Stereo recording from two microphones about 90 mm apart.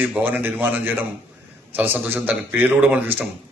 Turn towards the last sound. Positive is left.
turn(degrees=-20)  # may be behind; listen again after turning